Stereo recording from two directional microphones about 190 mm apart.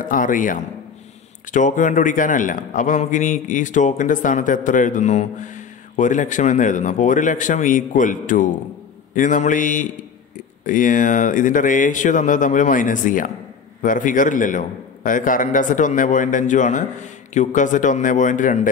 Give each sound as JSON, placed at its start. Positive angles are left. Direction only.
{"t": 0.0, "sound": "a man's voice", "side_deg": 45}